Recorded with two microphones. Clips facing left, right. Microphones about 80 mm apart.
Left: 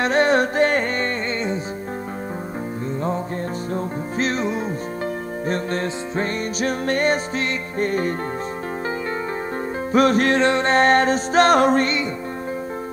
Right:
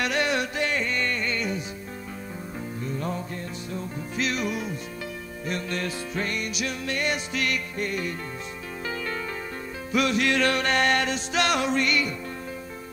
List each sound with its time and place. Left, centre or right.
0.0 s music: left
3.7 s music: left
9.9 s music: left
10.4 s music: left